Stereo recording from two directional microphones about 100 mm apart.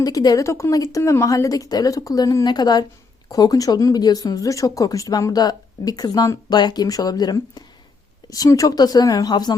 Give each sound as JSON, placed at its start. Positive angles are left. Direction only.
{"t": 0.0, "sound": "speech", "side_deg": 40}